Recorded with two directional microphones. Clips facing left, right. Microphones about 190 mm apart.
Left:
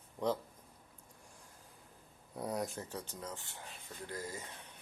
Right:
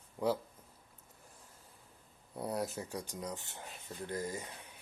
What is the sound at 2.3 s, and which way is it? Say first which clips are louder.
Speech: right 1 dB; centre (ahead or behind).